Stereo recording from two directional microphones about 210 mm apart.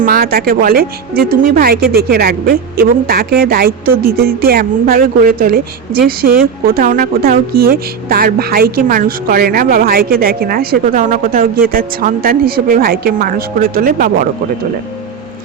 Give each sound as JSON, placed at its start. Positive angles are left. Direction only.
{"t": 0.0, "sound": "a woman's voice", "side_deg": -45}